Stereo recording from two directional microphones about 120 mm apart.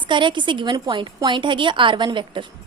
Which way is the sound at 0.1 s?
40° right (ahead or behind).